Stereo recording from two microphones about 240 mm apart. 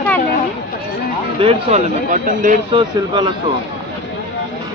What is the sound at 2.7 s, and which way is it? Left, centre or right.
Speech, centre.